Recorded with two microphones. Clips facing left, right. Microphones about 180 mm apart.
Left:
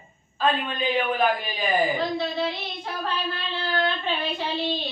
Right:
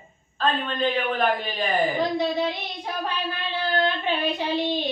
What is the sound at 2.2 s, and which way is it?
Child singing, 15° right (ahead or behind).